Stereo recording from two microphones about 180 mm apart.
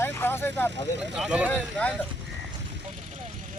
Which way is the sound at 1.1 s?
5° right (ahead or behind).